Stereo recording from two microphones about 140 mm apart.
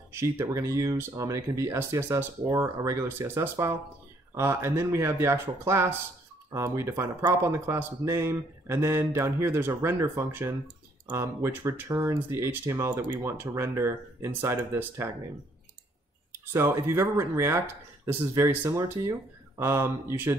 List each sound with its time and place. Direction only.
0.1 s speech: 20° right (ahead or behind)
16.5 s speech: 15° right (ahead or behind)